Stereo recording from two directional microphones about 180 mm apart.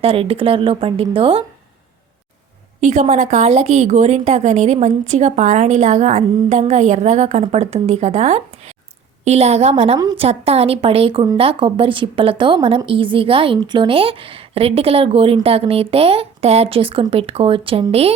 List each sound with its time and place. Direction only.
0.0 s a woman's voice: 30° right (ahead or behind)
2.8 s a woman's voice: 40° right (ahead or behind)
10.0 s a woman's voice: 20° right (ahead or behind)
10.2 s a woman's voice: 35° right (ahead or behind)